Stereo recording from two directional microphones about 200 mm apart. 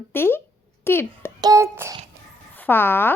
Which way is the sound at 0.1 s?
10° left (ahead or behind).